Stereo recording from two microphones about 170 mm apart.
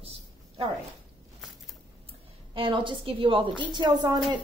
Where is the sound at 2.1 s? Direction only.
30° right (ahead or behind).